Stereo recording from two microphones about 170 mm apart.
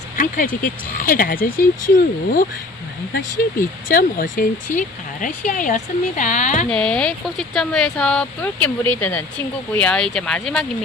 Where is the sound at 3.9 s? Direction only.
55° left (ahead or behind).